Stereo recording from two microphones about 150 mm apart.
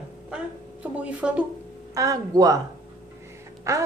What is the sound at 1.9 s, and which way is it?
Speech, 25° right (ahead or behind).